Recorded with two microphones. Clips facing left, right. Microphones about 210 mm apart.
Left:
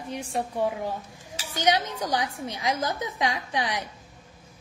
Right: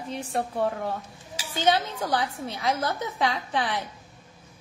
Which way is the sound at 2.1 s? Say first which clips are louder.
Right 2 dB; 15° left (ahead or behind).